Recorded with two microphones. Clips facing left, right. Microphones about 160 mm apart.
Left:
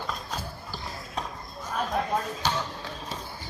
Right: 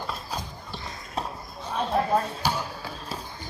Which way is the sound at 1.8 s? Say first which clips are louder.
Right 4 dB; 30° right (ahead or behind).